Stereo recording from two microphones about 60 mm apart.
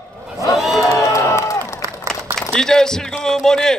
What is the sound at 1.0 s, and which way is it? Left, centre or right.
Music, left.